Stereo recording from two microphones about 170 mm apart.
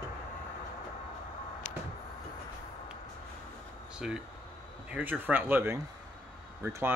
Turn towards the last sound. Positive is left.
turn(degrees=-15)  # may be behind; listen again after turning